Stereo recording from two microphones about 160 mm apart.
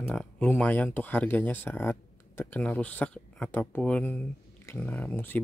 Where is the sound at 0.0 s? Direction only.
5° left (ahead or behind).